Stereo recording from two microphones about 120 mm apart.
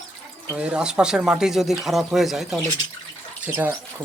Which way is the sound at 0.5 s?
10° right (ahead or behind).